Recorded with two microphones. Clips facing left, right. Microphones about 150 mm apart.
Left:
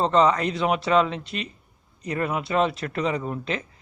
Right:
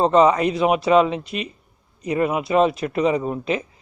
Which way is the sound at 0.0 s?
15° right (ahead or behind).